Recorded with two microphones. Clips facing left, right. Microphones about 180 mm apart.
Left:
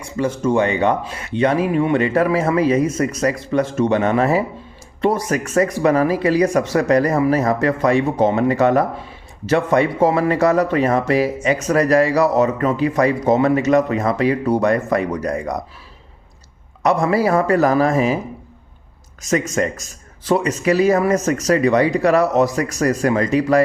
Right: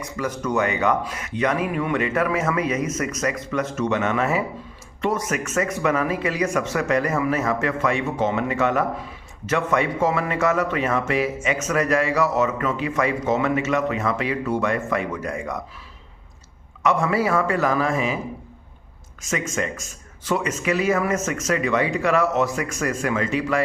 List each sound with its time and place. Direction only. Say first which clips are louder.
0.0 s speech: left 7 dB; 30° left (ahead or behind)
16.8 s speech: left 4 dB; 35° left (ahead or behind)
19.2 s speech: left 7 dB; 40° left (ahead or behind)